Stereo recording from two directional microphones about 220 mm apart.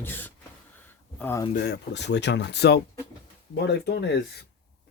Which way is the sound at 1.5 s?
50° left (ahead or behind).